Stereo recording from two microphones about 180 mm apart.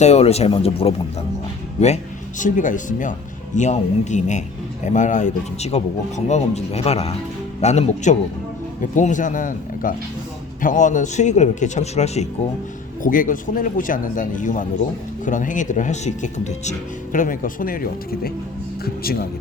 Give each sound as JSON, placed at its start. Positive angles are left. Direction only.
{"t": 0.0, "sound": "speech", "side_deg": 35}
{"t": 2.4, "sound": "speech", "side_deg": 45}
{"t": 13.0, "sound": "speech", "side_deg": 50}